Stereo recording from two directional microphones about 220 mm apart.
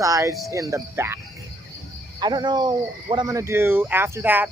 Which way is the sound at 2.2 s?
20° right (ahead or behind).